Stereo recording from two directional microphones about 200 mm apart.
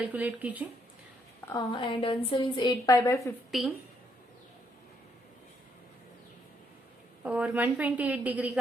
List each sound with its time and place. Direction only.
0.0 s a woman's voice: 10° right (ahead or behind)
1.5 s a woman's voice: 20° left (ahead or behind)
3.5 s a woman's voice: centre (ahead or behind)
7.2 s a woman's voice: 5° right (ahead or behind)